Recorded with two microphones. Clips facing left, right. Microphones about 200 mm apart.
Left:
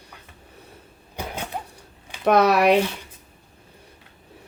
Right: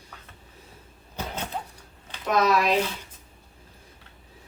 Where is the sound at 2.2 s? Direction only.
65° left (ahead or behind).